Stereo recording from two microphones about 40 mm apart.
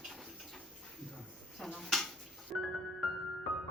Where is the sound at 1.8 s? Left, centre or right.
Centre.